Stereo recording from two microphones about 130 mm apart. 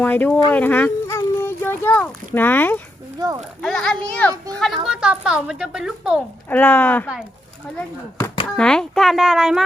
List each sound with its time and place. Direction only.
0.0 s a child's voice: 15° left (ahead or behind)
0.5 s a sound: 15° left (ahead or behind)
2.3 s a child's voice: 15° left (ahead or behind)
3.2 s a child's voice: 30° right (ahead or behind)
3.6 s a child's voice: 5° left (ahead or behind)
4.9 s a woman's voice: 5° right (ahead or behind)
6.5 s a child's voice: 15° left (ahead or behind)
8.4 s a woman's voice: 5° left (ahead or behind)